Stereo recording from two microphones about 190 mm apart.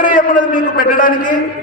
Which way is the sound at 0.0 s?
45° left (ahead or behind).